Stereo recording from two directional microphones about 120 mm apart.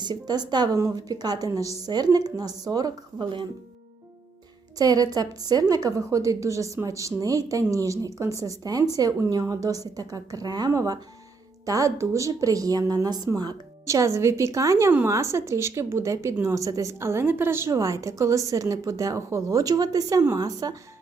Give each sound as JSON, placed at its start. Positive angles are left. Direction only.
{"t": 0.0, "sound": "a woman's voice", "side_deg": -35}
{"t": 4.8, "sound": "a woman's voice", "side_deg": -30}